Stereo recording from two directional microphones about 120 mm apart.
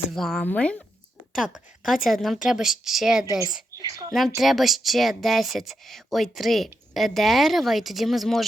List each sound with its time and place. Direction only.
0.1 s speech: centre (ahead or behind)
1.4 s speech: centre (ahead or behind)
3.8 s a woman's voice: 30° right (ahead or behind)
4.4 s speech: centre (ahead or behind)